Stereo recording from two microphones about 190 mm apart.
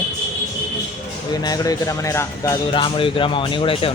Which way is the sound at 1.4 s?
20° left (ahead or behind).